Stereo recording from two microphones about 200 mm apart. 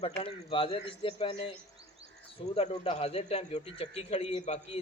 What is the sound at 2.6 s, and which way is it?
A man's voice, 30° left (ahead or behind).